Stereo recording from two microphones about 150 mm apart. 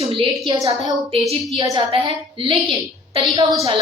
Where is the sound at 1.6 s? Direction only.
35° right (ahead or behind).